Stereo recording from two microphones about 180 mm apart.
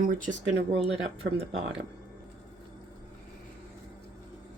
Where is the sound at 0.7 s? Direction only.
75° right (ahead or behind).